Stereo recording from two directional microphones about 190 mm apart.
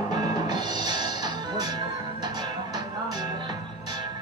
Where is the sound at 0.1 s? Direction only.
20° right (ahead or behind).